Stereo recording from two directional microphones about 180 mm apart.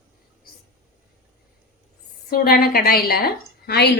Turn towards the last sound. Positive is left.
turn(degrees=60)  # may be behind; listen again after turning